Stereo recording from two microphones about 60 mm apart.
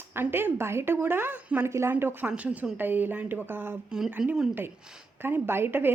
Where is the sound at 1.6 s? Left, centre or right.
Right.